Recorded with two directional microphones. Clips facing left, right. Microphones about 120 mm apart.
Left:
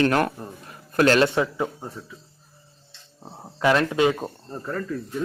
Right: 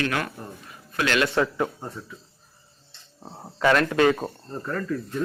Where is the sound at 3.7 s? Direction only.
15° left (ahead or behind).